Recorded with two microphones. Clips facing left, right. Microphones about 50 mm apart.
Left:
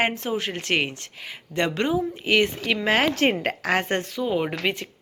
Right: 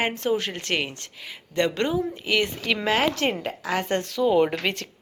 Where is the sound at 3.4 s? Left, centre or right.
Left.